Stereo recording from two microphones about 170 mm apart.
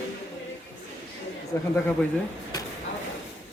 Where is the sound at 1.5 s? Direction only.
15° left (ahead or behind).